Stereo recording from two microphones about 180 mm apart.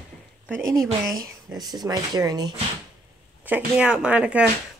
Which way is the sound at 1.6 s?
20° right (ahead or behind).